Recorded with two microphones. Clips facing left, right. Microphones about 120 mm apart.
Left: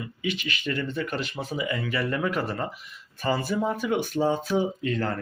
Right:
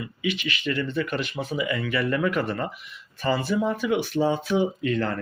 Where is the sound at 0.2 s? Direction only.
45° left (ahead or behind).